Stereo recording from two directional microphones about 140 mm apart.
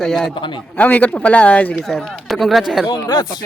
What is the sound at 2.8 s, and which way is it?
Speech, 30° left (ahead or behind).